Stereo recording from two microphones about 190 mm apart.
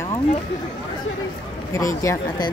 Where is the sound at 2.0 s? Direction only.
20° left (ahead or behind).